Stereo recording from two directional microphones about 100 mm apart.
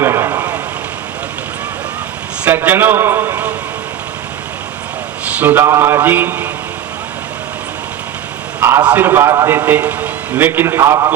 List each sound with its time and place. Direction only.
0.0 s a sound: 25° right (ahead or behind)
2.4 s a man's voice: 20° right (ahead or behind)
5.4 s a man's voice: 15° right (ahead or behind)
8.8 s a man's voice: 20° right (ahead or behind)